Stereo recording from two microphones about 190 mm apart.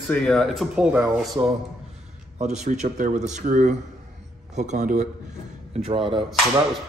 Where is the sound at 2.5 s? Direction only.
35° right (ahead or behind).